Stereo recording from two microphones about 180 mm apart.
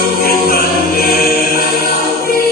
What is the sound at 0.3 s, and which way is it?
Choir, 55° left (ahead or behind).